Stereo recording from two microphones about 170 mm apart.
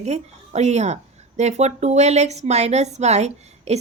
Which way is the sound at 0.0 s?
40° right (ahead or behind).